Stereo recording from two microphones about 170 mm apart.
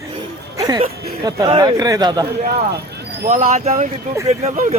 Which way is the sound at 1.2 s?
20° right (ahead or behind).